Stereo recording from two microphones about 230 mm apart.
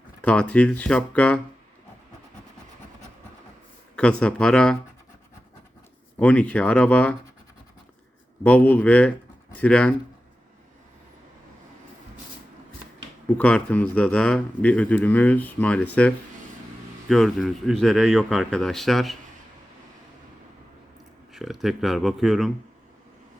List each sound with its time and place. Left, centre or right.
0.2 s speech: centre
3.9 s speech: centre
6.1 s speech: centre
8.4 s speech: centre
13.2 s speech: centre
21.3 s speech: centre